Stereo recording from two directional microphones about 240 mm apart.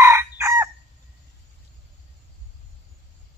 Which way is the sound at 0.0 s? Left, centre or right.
Centre.